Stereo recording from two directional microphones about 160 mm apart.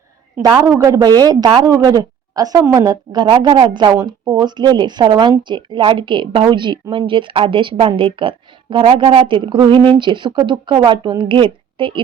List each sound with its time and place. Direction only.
0.5 s speech: 20° right (ahead or behind)